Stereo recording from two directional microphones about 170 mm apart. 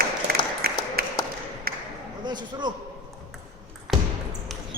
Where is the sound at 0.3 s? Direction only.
65° right (ahead or behind).